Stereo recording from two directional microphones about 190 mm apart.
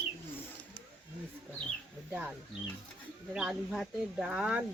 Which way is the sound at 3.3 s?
Centre (ahead or behind).